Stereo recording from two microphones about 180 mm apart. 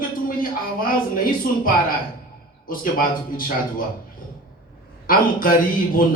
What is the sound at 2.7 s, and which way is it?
Speech, 50° left (ahead or behind).